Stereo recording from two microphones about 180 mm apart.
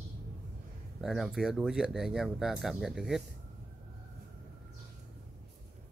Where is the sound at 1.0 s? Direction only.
Centre (ahead or behind).